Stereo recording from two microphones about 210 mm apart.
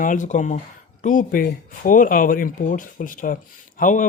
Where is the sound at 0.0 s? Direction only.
35° left (ahead or behind).